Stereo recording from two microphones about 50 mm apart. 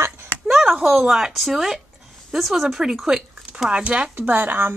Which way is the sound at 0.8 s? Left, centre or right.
Centre.